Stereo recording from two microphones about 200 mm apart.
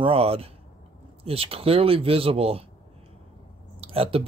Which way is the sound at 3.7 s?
30° right (ahead or behind).